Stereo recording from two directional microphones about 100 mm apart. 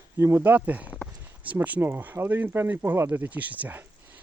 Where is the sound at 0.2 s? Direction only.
25° right (ahead or behind).